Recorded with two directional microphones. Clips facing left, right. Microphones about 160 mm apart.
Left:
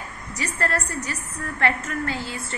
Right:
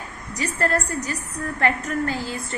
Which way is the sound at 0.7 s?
40° right (ahead or behind).